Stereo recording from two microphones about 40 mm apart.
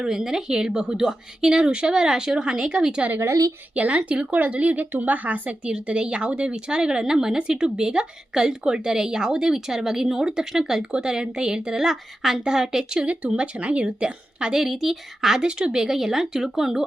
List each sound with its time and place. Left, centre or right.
0.0 s speech: centre
3.8 s speech: right
5.7 s a woman's voice: right
11.8 s speech: centre
13.1 s a woman's voice: right
14.5 s speech: centre
15.4 s speech: right